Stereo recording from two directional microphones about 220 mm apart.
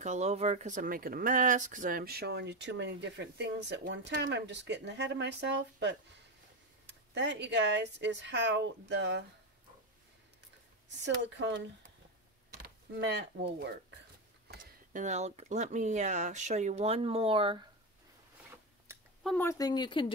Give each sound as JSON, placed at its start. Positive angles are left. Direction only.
{"t": 0.0, "sound": "speech", "side_deg": -30}
{"t": 11.2, "sound": "speech", "side_deg": -55}
{"t": 12.6, "sound": "speech", "side_deg": -55}
{"t": 14.5, "sound": "speech", "side_deg": -35}
{"t": 19.2, "sound": "speech", "side_deg": 10}